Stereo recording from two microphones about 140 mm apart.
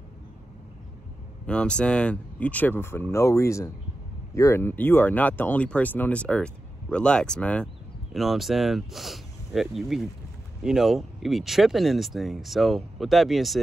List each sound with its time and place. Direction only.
1.4 s speech: 5° left (ahead or behind)